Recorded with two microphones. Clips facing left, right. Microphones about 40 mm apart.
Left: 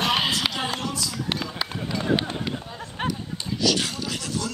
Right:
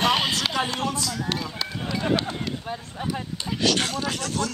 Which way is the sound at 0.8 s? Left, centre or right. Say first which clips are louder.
Right 2 dB; right.